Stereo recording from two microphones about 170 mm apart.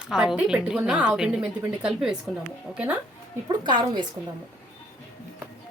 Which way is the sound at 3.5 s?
25° right (ahead or behind).